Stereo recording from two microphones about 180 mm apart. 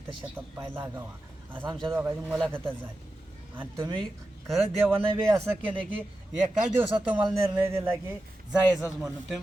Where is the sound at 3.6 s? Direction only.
20° right (ahead or behind).